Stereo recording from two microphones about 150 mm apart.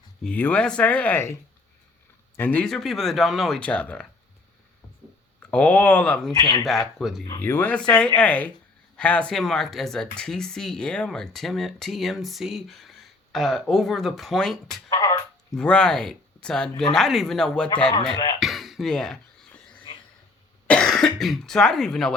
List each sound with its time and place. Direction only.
0.2 s speech: 10° left (ahead or behind)
5.4 s speech: 10° left (ahead or behind)
6.3 s speech: 25° left (ahead or behind)
6.7 s speech: centre (ahead or behind)
7.4 s speech: 15° left (ahead or behind)
14.8 s music: 25° left (ahead or behind)
15.5 s speech: 5° left (ahead or behind)
18.1 s speech: 30° left (ahead or behind)
18.3 s cough: centre (ahead or behind)
20.7 s speech: 5° left (ahead or behind)